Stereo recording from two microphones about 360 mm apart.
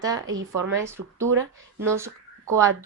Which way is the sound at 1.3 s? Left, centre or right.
Right.